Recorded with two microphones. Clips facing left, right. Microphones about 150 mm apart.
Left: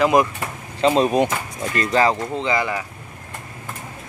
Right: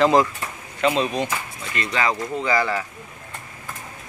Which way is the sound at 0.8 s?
40° left (ahead or behind).